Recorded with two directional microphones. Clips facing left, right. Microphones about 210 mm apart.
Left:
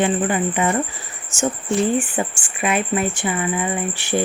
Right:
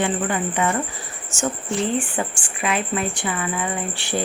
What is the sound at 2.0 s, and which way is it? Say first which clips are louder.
Speech: left 2 dB; 20° left (ahead or behind).